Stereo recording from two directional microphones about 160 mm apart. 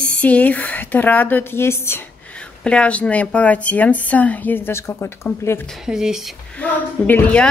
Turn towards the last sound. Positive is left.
turn(degrees=10)  # may be behind; listen again after turning